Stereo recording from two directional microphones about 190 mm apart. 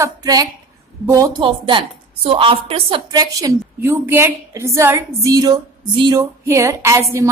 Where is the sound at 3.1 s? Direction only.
20° right (ahead or behind).